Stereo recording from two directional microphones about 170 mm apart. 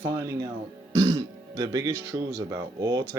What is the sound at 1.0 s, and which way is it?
Throat clearing, 20° right (ahead or behind).